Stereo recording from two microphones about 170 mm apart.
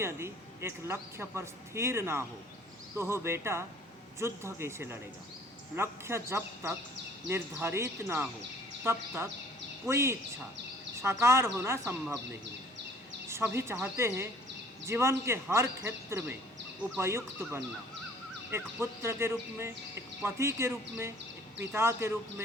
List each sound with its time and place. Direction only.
0.0 s speech: 15° right (ahead or behind)
13.2 s speech: 15° right (ahead or behind)